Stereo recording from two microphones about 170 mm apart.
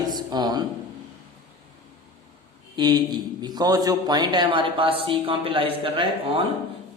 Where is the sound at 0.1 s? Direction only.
25° right (ahead or behind).